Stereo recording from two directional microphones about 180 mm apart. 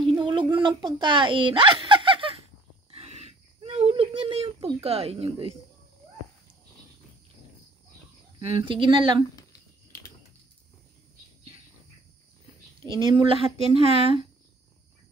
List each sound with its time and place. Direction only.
0.0 s a sound: 30° right (ahead or behind)
4.8 s speech: 35° right (ahead or behind)
8.4 s speech: 30° right (ahead or behind)
12.8 s speech: 30° right (ahead or behind)